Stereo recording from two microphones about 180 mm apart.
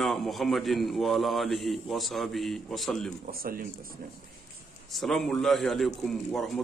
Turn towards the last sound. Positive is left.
turn(degrees=0)  # may be behind; listen again after turning